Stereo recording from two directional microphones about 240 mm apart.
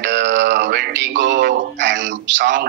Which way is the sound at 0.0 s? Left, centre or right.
Right.